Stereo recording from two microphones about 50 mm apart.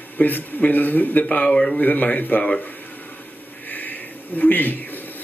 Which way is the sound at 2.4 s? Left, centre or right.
Left.